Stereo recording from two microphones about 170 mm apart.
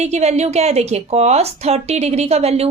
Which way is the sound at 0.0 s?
40° right (ahead or behind).